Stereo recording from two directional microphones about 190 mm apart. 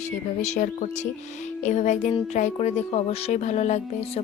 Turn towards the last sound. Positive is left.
turn(degrees=35)  # may be behind; listen again after turning